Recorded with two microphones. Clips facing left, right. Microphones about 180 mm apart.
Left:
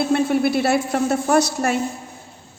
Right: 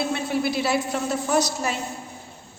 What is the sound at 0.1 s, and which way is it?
A woman's voice, 55° left (ahead or behind).